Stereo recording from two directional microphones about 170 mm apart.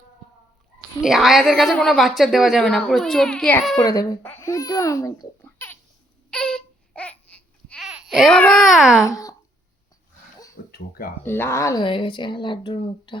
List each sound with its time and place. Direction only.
1.0 s a woman's voice: centre (ahead or behind)
3.8 s speech: 20° left (ahead or behind)
6.3 s baby cry: 5° left (ahead or behind)
7.9 s speech: centre (ahead or behind)
9.0 s speech: 20° left (ahead or behind)
10.7 s speech: 60° left (ahead or behind)
11.2 s speech: 15° left (ahead or behind)
11.8 s speech: 30° left (ahead or behind)